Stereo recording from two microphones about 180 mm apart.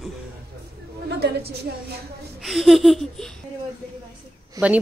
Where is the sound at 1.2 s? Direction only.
60° right (ahead or behind).